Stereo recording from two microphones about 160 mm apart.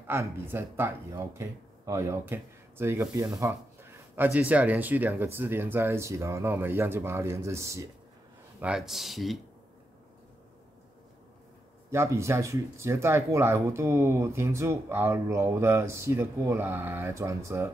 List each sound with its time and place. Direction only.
0.0 s speech: 15° right (ahead or behind)
8.5 s speech: 5° right (ahead or behind)
11.9 s speech: 15° right (ahead or behind)